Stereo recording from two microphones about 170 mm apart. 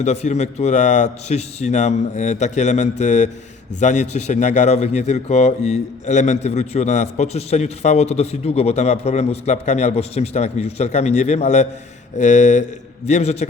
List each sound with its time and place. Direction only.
0.0 s a man's voice: 40° left (ahead or behind)